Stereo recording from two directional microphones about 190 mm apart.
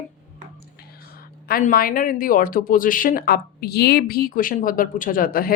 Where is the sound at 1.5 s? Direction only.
50° left (ahead or behind).